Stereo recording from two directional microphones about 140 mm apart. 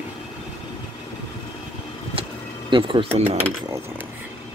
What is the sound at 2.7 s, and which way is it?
Speech, 40° right (ahead or behind).